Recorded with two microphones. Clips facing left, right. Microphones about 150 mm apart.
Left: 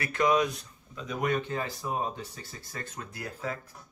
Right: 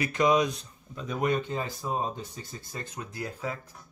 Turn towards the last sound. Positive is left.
turn(degrees=-15)  # may be behind; listen again after turning